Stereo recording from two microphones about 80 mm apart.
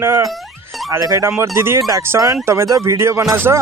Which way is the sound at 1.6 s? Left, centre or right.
Right.